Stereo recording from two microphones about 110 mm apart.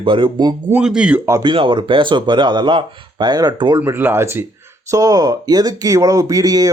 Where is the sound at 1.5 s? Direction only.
50° right (ahead or behind).